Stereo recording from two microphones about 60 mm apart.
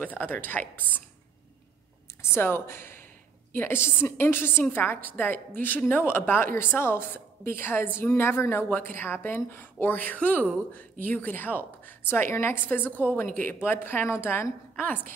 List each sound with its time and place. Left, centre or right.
0.0 s a woman's voice: left
2.3 s a woman's voice: left
12.3 s speech: left
12.7 s a woman's voice: left